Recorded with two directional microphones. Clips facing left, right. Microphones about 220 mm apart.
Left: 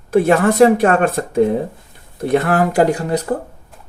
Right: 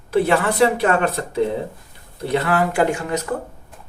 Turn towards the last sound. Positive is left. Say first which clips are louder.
# left 4 dB
turn(degrees=35)  # may be behind; listen again after turning